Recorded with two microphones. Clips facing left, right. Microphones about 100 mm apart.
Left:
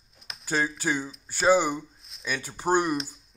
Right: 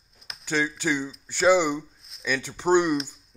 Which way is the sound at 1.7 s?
10° left (ahead or behind).